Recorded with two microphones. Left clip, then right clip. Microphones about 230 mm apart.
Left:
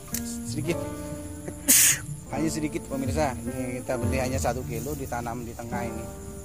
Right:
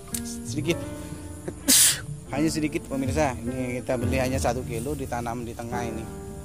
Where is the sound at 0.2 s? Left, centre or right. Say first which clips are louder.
Even; right.